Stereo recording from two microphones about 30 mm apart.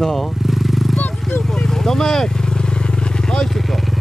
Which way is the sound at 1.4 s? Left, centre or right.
Centre.